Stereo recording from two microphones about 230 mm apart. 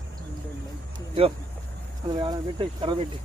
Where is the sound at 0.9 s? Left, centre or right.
Right.